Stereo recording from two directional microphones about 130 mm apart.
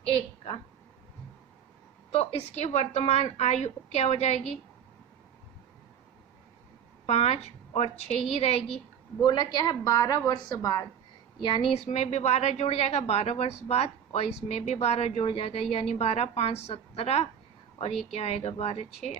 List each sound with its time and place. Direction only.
0.0 s a woman's voice: 50° left (ahead or behind)
2.1 s a woman's voice: 55° left (ahead or behind)
7.1 s a woman's voice: 55° left (ahead or behind)
9.2 s a woman's voice: 35° left (ahead or behind)
11.4 s a woman's voice: 40° left (ahead or behind)
11.9 s a woman's voice: 60° left (ahead or behind)